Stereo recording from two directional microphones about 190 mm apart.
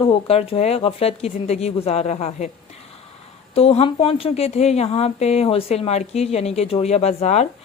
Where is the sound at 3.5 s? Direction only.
30° left (ahead or behind).